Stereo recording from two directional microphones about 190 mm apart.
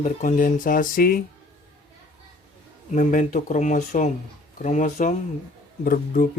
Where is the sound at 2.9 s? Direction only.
40° left (ahead or behind).